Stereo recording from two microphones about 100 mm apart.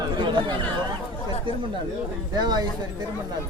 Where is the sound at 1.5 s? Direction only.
55° right (ahead or behind).